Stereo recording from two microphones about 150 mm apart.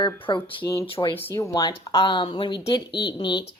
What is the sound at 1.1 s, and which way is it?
Speech, 15° left (ahead or behind).